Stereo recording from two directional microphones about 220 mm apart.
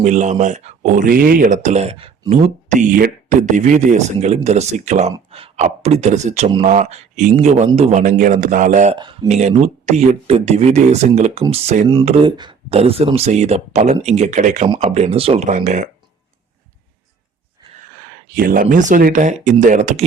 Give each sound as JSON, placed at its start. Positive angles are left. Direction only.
{"t": 0.0, "sound": "speech", "side_deg": -35}
{"t": 18.3, "sound": "speech", "side_deg": -40}